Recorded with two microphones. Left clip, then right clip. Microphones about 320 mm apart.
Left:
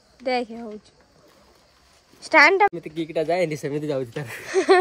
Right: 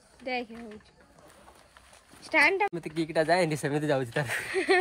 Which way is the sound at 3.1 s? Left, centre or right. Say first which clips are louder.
Left 2 dB; right.